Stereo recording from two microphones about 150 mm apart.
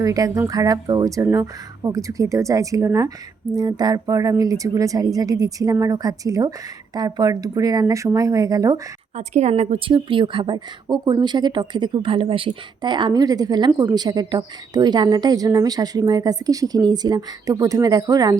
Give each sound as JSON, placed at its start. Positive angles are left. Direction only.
{"t": 0.0, "sound": "speech", "side_deg": -25}
{"t": 9.1, "sound": "a woman's voice", "side_deg": -50}